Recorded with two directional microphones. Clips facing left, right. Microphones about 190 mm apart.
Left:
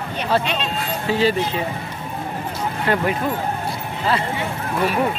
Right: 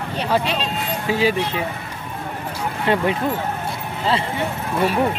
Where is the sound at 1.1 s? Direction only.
15° right (ahead or behind).